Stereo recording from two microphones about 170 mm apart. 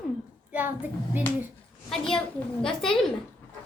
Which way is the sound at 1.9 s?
5° left (ahead or behind).